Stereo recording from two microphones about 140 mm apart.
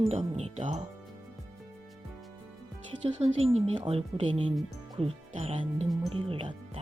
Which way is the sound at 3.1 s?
45° right (ahead or behind).